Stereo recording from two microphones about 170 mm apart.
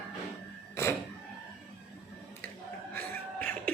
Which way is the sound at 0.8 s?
15° left (ahead or behind).